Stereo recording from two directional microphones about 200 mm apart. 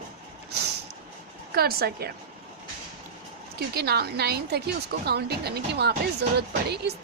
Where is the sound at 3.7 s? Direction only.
55° right (ahead or behind).